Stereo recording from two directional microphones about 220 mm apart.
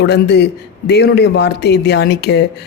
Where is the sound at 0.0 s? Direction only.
50° left (ahead or behind).